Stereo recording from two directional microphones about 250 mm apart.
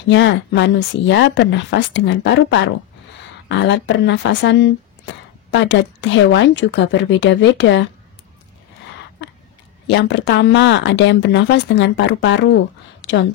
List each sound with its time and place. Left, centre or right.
0.1 s speech: left
9.8 s a woman's voice: left